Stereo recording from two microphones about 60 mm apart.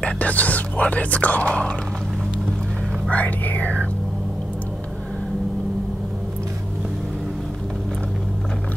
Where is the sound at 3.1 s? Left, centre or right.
Left.